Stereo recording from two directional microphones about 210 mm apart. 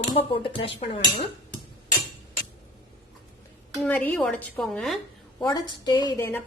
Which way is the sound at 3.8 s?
5° left (ahead or behind).